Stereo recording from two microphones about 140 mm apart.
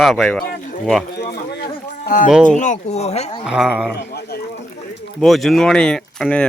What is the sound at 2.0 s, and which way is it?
Speech, 70° left (ahead or behind).